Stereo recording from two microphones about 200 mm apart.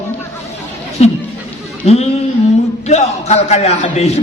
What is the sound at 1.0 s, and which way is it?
A man's voice, 35° left (ahead or behind).